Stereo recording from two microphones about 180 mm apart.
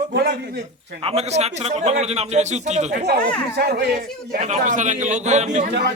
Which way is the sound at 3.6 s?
65° right (ahead or behind).